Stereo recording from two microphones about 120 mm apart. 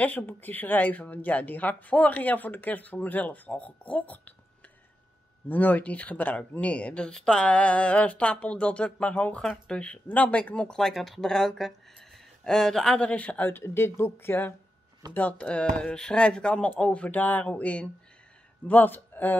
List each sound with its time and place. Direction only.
0.0 s speech: 15° left (ahead or behind)
5.5 s speech: 15° left (ahead or behind)